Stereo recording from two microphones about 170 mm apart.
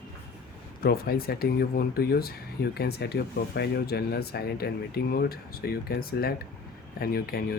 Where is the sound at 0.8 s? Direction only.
65° left (ahead or behind).